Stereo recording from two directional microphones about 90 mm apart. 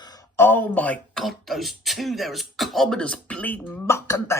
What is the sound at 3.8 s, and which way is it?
Speech, 30° left (ahead or behind).